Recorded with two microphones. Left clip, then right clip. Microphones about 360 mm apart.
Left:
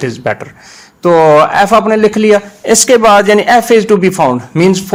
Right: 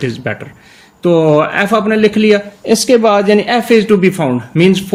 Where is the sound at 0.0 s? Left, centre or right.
Centre.